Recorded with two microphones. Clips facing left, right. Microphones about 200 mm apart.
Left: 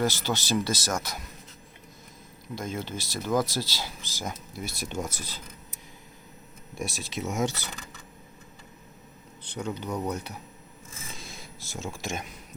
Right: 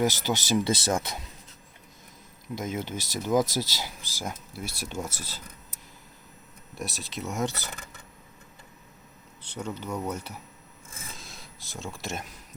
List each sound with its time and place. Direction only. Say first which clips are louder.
0.0 s speech: right 1 dB; 15° right (ahead or behind)
2.6 s speech: right 1 dB; 15° right (ahead or behind)
6.7 s speech: left 2 dB; centre (ahead or behind)
9.6 s speech: left 1 dB; 5° right (ahead or behind)
11.1 s a sound: left 3 dB; centre (ahead or behind)